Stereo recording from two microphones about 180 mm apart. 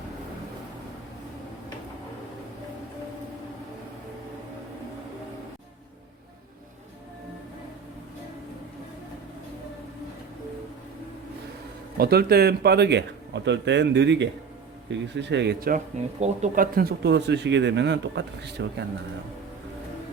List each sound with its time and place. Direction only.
11.9 s speech: 60° right (ahead or behind)
16.2 s speech: 40° right (ahead or behind)
16.7 s speech: 65° right (ahead or behind)